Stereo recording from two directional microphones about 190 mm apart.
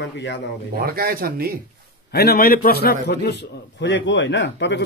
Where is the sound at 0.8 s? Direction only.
50° right (ahead or behind).